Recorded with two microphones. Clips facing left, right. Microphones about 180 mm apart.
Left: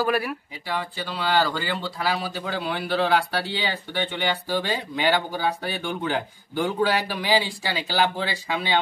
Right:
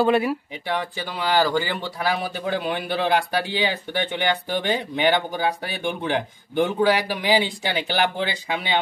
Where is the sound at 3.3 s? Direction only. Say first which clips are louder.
Right 4 dB; 15° right (ahead or behind).